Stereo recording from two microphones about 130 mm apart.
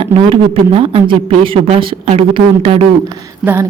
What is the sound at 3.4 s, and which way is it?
Speech, 15° right (ahead or behind).